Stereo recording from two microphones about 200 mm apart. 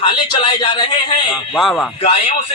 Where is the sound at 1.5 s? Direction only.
Centre (ahead or behind).